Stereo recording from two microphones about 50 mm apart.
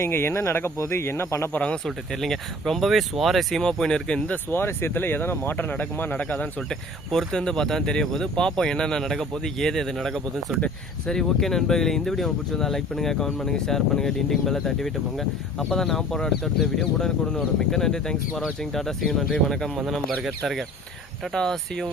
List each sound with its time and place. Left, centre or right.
0.0 s speech: left
1.5 s speech: left
1.8 s speech: centre
3.6 s speech: centre
4.4 s speech: left
6.7 s speech: centre
17.7 s speech: centre
21.3 s speech: centre